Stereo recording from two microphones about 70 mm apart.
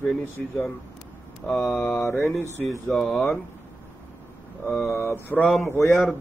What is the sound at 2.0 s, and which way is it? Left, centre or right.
Mantra, left.